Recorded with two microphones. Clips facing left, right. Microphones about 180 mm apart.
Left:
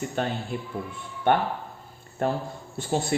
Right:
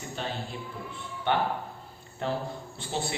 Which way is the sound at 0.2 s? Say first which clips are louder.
Left 5 dB; 55° left (ahead or behind).